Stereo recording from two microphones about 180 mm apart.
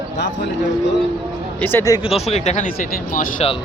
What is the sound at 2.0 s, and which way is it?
Speech, 35° left (ahead or behind).